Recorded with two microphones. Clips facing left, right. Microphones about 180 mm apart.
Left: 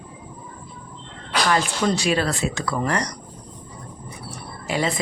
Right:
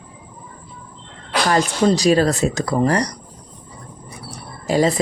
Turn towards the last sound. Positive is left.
turn(degrees=-40)  # may be behind; listen again after turning